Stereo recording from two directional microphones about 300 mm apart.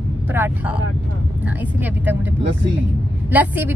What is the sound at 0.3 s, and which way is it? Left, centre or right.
A woman's voice, centre.